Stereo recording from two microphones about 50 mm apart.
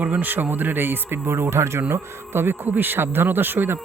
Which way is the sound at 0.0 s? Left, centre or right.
Right.